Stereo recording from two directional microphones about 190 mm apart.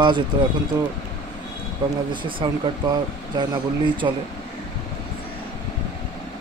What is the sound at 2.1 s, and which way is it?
Speech, 25° right (ahead or behind).